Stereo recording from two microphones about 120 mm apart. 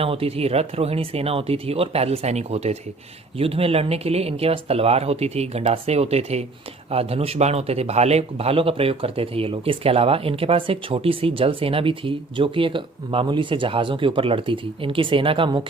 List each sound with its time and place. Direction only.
0.0 s speech: 55° right (ahead or behind)